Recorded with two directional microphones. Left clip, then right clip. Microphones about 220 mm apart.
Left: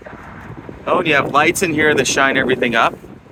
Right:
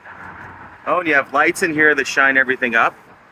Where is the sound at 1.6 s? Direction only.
30° left (ahead or behind).